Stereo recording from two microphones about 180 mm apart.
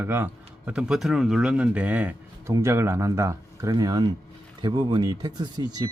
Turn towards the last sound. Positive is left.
turn(degrees=-25)  # may be behind; listen again after turning